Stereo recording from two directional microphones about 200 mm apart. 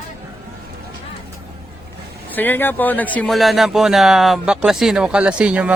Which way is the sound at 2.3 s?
10° left (ahead or behind).